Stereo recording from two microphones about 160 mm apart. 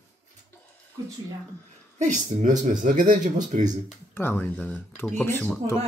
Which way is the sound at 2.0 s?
50° right (ahead or behind).